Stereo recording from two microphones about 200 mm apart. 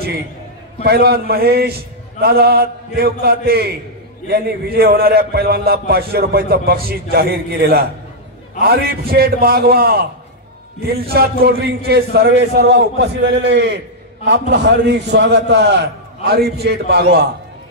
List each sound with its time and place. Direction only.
0.8 s a man's voice: 50° right (ahead or behind)